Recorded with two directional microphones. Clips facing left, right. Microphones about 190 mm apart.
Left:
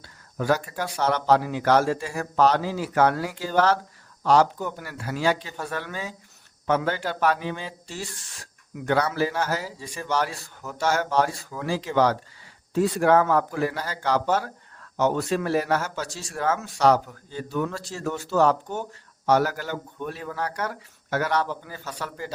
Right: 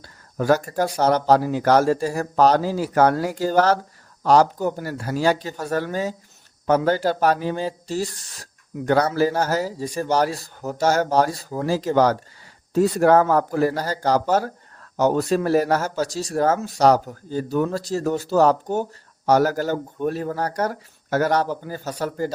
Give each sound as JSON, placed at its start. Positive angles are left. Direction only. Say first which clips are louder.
{"t": 0.0, "sound": "speech", "louder": "right 4 dB", "side_deg": -40}